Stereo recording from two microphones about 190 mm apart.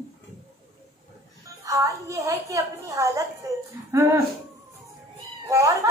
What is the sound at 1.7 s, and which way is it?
Music, 15° right (ahead or behind).